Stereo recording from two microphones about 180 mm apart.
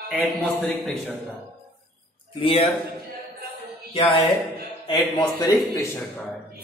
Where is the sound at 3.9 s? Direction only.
30° left (ahead or behind).